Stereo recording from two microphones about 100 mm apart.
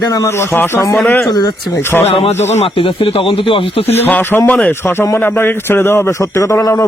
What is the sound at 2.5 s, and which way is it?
Speech, 60° left (ahead or behind).